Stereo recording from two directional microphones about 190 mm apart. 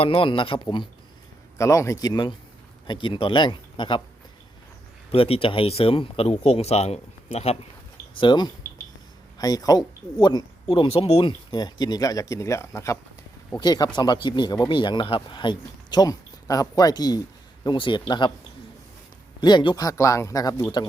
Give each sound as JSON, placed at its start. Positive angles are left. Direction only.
{"t": 0.0, "sound": "speech", "side_deg": 30}
{"t": 5.1, "sound": "speech", "side_deg": 30}
{"t": 19.4, "sound": "speech", "side_deg": 25}